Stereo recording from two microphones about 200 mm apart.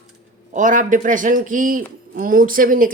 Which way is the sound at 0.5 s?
40° right (ahead or behind).